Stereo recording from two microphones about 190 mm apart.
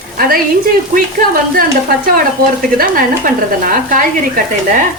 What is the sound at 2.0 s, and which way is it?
Speech, 50° right (ahead or behind).